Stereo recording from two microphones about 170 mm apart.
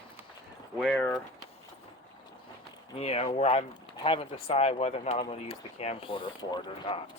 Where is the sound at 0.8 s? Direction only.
Centre (ahead or behind).